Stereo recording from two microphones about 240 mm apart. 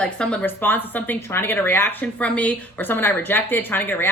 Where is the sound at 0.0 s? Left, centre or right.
Centre.